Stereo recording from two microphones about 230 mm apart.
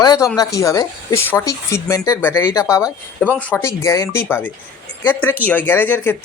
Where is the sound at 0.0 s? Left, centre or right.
Centre.